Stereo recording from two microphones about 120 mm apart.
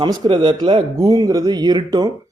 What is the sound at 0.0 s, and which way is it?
Speech, 45° right (ahead or behind).